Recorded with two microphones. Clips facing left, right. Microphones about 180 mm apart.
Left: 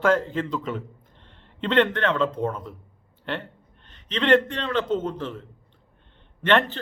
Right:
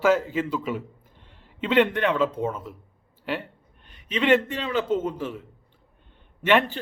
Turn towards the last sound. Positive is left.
turn(degrees=-10)  # may be behind; listen again after turning